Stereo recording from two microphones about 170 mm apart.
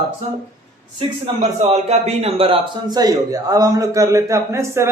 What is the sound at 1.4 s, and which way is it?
A man's voice, 40° right (ahead or behind).